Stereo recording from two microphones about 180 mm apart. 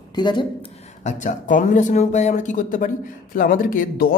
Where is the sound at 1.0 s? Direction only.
45° left (ahead or behind).